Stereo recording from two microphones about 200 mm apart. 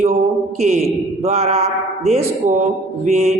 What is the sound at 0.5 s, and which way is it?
Speech, 35° right (ahead or behind).